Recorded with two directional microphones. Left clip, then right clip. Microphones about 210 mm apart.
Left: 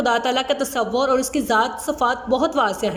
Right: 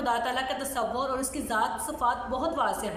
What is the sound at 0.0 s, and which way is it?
A woman's voice, 45° left (ahead or behind).